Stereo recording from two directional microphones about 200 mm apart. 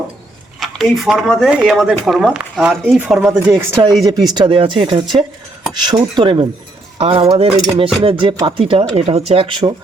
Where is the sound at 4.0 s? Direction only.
20° right (ahead or behind).